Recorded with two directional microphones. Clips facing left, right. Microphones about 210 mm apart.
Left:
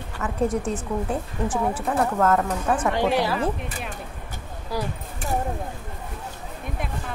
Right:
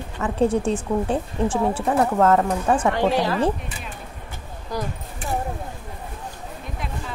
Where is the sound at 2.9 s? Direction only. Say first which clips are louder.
Right 1 dB; 15° left (ahead or behind).